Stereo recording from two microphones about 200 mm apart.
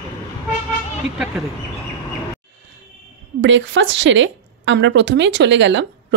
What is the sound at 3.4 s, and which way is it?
A woman's voice, 65° right (ahead or behind).